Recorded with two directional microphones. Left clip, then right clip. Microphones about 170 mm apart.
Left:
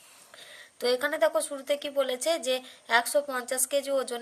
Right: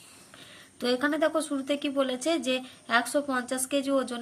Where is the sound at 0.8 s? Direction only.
25° left (ahead or behind).